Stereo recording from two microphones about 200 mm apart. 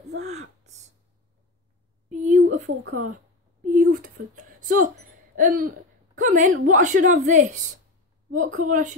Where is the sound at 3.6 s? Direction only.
40° right (ahead or behind).